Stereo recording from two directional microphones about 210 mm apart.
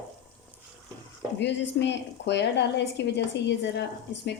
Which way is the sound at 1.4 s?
55° left (ahead or behind).